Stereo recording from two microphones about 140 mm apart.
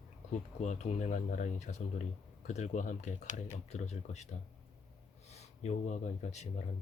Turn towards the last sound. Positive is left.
turn(degrees=55)  # may be behind; listen again after turning